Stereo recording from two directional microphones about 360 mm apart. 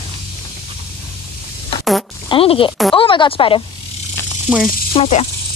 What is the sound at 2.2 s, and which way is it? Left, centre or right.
A child's voice, centre.